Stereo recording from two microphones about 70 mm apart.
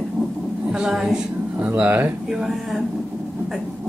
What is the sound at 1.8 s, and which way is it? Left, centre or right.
Speech, right.